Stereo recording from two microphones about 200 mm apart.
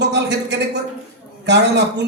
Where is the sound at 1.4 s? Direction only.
60° right (ahead or behind).